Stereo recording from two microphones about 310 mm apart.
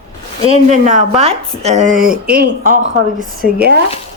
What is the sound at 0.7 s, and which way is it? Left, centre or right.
Speech, right.